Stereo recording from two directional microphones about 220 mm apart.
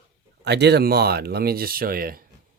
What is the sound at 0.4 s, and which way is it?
Speech, 50° right (ahead or behind).